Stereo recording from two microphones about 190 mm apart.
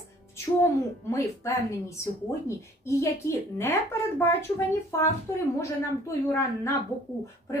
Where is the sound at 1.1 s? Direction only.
15° left (ahead or behind).